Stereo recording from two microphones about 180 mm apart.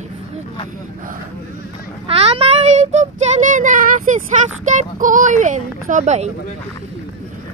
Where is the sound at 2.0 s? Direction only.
30° right (ahead or behind).